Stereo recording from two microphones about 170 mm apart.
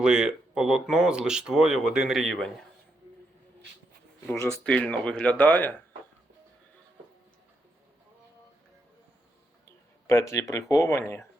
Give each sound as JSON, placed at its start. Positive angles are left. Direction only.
{"t": 0.0, "sound": "speech", "side_deg": -5}
{"t": 4.6, "sound": "speech", "side_deg": 5}
{"t": 10.1, "sound": "speech", "side_deg": 15}